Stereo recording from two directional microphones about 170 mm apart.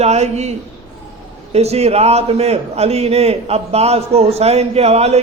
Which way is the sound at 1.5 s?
40° right (ahead or behind).